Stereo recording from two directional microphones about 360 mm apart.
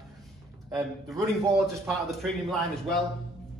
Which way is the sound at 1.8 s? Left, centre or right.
Centre.